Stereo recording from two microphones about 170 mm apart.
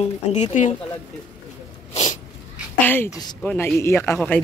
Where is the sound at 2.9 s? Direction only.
15° left (ahead or behind).